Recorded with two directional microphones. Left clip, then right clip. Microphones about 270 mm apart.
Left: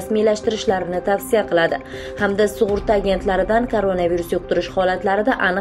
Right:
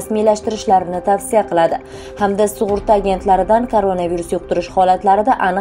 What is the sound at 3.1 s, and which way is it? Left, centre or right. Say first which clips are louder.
A woman's voice: right 5 dB; centre.